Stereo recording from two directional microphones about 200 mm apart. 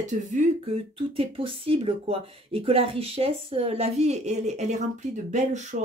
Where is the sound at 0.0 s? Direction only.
35° right (ahead or behind).